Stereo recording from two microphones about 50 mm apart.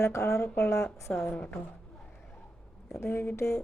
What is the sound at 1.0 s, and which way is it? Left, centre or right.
Speech, left.